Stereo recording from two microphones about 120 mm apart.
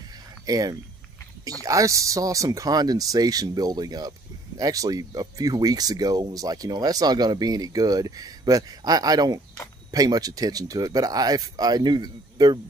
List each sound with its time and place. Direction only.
0.5 s speech: 30° right (ahead or behind)